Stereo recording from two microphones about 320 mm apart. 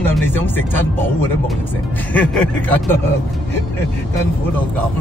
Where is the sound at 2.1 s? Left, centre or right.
Centre.